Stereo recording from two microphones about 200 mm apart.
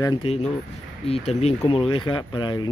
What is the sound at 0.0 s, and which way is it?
Speech, 25° left (ahead or behind).